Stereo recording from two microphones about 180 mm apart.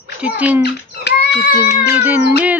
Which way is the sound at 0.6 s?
70° left (ahead or behind).